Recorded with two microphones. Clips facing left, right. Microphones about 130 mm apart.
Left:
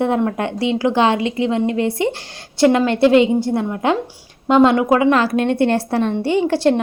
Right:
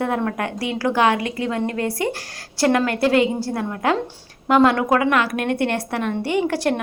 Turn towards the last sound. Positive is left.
turn(degrees=25)  # may be behind; listen again after turning